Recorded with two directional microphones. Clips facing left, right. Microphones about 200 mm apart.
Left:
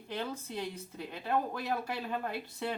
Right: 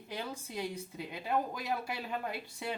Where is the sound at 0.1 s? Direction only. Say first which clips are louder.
Left 3 dB; 10° right (ahead or behind).